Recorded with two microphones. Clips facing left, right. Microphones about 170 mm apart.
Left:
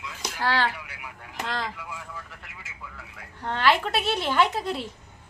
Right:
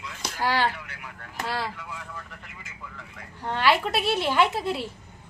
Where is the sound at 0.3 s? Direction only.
10° right (ahead or behind).